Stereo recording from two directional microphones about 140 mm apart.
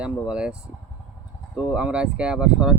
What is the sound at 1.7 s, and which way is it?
Speech, 10° right (ahead or behind).